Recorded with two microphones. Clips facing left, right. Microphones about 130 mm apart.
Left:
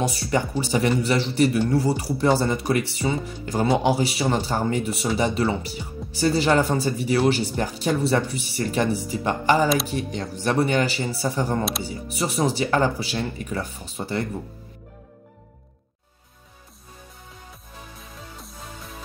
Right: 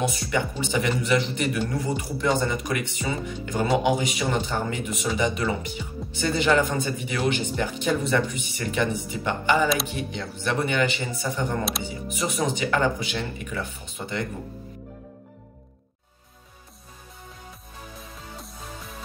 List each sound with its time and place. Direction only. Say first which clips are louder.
0.0 s a man's voice: left 2 dB; 35° left (ahead or behind)